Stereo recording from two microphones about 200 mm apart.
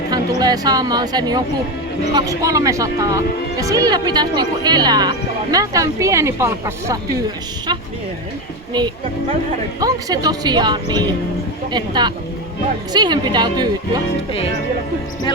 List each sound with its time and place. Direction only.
0.1 s speech: 20° right (ahead or behind)
9.8 s speech: 20° right (ahead or behind)